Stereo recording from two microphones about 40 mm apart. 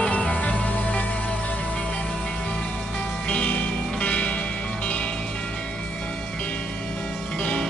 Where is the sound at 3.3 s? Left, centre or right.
Left.